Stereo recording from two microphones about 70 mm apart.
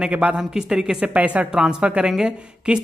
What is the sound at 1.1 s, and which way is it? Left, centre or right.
A woman's voice, right.